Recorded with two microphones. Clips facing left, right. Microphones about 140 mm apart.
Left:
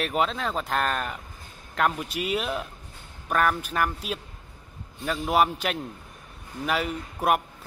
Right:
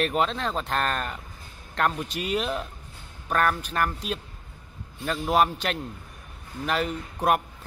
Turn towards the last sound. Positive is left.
turn(degrees=5)  # may be behind; listen again after turning